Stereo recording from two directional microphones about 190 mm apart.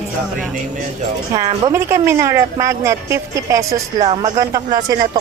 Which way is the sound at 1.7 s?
15° right (ahead or behind).